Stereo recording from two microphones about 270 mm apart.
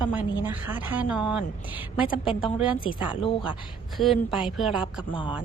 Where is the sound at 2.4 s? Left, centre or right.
Centre.